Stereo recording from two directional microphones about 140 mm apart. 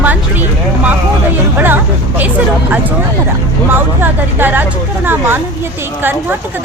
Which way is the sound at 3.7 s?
15° right (ahead or behind).